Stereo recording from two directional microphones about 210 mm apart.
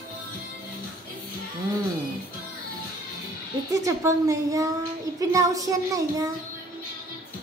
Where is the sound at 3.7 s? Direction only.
15° right (ahead or behind).